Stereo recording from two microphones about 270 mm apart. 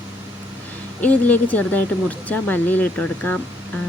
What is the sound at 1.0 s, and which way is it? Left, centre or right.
Speech, centre.